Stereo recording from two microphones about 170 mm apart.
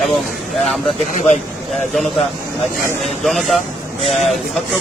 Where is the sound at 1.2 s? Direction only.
45° left (ahead or behind).